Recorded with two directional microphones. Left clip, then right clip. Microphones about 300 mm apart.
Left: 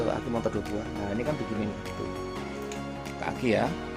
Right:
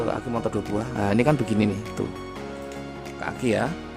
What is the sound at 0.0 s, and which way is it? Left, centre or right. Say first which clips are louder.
Speech: right 2 dB; centre.